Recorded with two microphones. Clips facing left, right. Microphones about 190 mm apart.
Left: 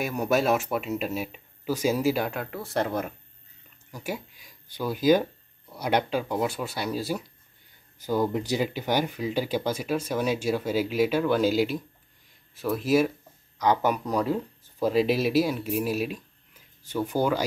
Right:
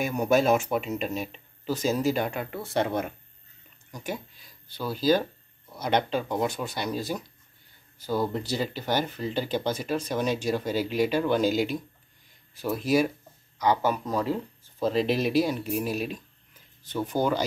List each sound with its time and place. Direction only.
0.0 s speech: centre (ahead or behind)
13.8 s speech: 15° left (ahead or behind)